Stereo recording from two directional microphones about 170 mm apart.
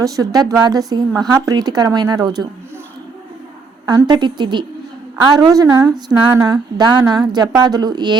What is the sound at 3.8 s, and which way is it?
Speech, 25° right (ahead or behind).